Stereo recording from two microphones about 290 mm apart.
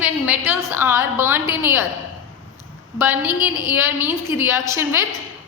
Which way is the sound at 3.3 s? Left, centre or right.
Left.